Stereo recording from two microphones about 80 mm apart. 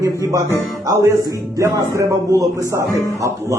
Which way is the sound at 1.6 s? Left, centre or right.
Right.